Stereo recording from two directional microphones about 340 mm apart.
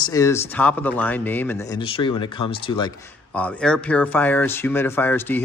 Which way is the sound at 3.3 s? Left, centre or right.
Centre.